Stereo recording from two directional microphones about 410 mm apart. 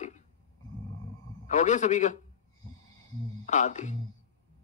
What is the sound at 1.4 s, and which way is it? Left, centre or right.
Speech, centre.